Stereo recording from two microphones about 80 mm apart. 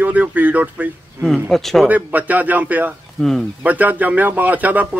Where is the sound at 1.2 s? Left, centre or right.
Right.